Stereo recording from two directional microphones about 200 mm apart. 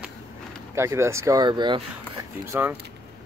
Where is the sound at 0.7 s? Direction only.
15° right (ahead or behind).